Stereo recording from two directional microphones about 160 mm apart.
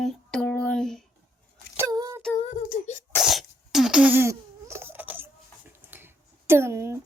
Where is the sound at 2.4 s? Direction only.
50° left (ahead or behind).